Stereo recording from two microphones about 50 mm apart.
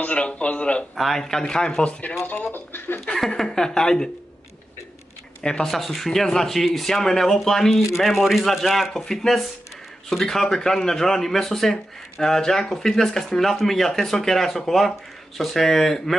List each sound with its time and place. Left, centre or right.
0.1 s speech: left
0.9 s speech: centre; by 2.1 s left
2.5 s speech: left
3.1 s speech: centre
5.4 s speech: centre
5.7 s speech: centre